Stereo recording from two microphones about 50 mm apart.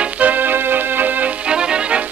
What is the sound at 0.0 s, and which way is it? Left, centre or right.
Music, right.